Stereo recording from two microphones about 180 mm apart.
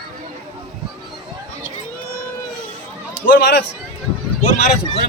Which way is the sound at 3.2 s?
55° left (ahead or behind).